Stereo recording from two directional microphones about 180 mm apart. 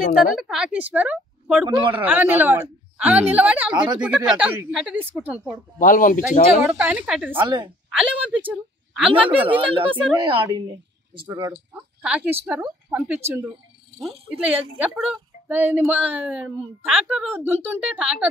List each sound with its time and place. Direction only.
0.0 s speech: 50° left (ahead or behind)
0.4 s a woman's voice: 5° right (ahead or behind)
1.7 s speech: 25° right (ahead or behind)
2.0 s a woman's voice: 10° right (ahead or behind)
3.7 s speech: 25° right (ahead or behind)
4.0 s a woman's voice: 5° right (ahead or behind)
5.8 s speech: 50° left (ahead or behind)
6.6 s a woman's voice: 10° right (ahead or behind)
9.3 s speech: 30° right (ahead or behind)
11.5 s a woman's voice: 5° right (ahead or behind)
14.3 s a woman's voice: 10° right (ahead or behind)